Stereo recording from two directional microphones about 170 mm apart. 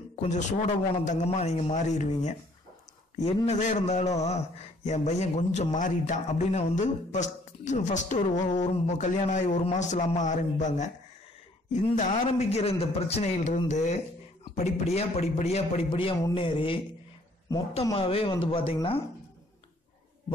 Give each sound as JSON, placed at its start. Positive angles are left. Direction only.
{"t": 0.1, "sound": "a man's voice", "side_deg": 45}
{"t": 3.4, "sound": "a man's voice", "side_deg": 40}
{"t": 17.9, "sound": "a man's voice", "side_deg": 30}